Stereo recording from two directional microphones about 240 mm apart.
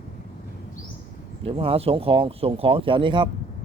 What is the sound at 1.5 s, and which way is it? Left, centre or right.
Speech, right.